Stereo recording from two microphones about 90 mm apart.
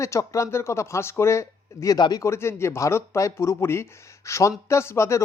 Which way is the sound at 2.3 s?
30° left (ahead or behind).